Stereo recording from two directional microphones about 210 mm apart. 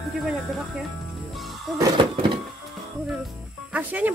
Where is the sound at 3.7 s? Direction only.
10° right (ahead or behind).